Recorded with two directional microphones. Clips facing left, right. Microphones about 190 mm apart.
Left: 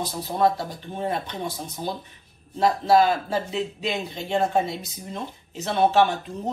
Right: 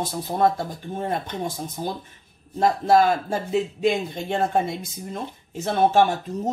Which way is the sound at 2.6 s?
50° right (ahead or behind).